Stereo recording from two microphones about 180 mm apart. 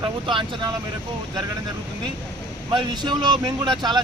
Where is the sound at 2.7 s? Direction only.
25° right (ahead or behind).